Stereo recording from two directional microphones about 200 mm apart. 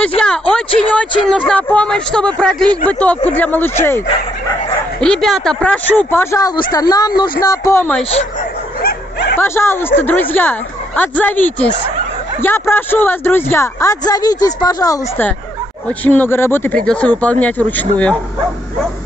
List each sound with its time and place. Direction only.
0.2 s speech: 5° left (ahead or behind)
5.0 s speech: 5° left (ahead or behind)
8.8 s dog: 50° left (ahead or behind)
9.4 s speech: 10° left (ahead or behind)